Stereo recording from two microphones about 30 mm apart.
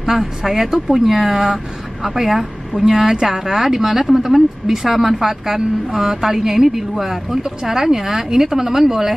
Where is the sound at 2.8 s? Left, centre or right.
Right.